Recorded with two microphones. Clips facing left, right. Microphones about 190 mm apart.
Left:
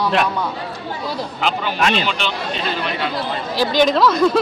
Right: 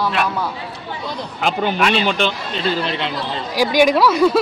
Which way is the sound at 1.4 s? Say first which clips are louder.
Right 4 dB; 50° right (ahead or behind).